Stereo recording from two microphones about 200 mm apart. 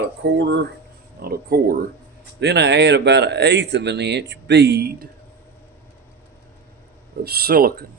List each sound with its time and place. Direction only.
0.0 s speech: 55° right (ahead or behind)
7.3 s speech: 50° right (ahead or behind)